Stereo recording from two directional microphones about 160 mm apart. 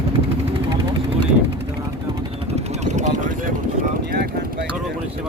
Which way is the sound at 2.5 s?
45° right (ahead or behind).